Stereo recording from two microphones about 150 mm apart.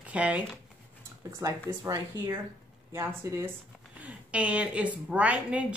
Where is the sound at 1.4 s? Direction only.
20° right (ahead or behind).